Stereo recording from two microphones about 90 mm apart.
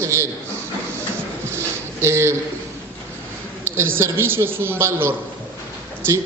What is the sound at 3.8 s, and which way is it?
A man's voice, 25° right (ahead or behind).